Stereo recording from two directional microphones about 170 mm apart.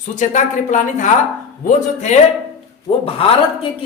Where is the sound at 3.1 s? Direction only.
35° left (ahead or behind).